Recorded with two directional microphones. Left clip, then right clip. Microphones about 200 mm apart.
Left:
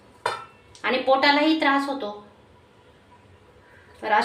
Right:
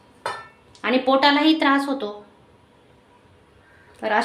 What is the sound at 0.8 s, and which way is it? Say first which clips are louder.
A woman's voice: right 2 dB; 60° right (ahead or behind).